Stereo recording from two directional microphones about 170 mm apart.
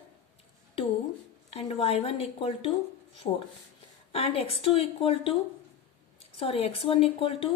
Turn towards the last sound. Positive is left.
turn(degrees=35)  # may be behind; listen again after turning